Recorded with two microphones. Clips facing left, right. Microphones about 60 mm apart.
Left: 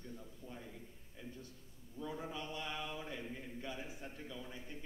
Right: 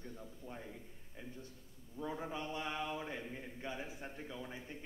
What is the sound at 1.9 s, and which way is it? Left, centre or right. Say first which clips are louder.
A man's voice: right 2 dB; right.